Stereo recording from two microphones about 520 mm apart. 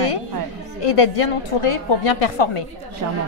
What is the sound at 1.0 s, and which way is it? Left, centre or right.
A woman's voice, left.